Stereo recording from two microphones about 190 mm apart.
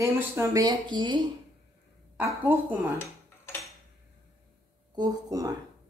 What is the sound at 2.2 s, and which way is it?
Speech, 10° right (ahead or behind).